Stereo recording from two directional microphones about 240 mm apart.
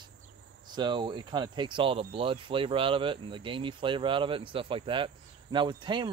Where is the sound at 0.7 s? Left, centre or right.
Centre.